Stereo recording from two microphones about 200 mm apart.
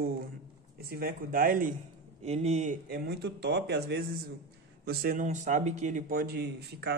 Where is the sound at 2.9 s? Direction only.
50° right (ahead or behind).